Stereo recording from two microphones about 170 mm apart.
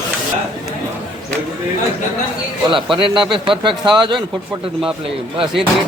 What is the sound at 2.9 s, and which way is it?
Speech, 30° right (ahead or behind).